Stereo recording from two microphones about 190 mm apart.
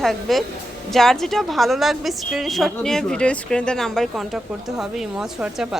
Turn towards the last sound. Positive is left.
turn(degrees=-5)  # may be behind; listen again after turning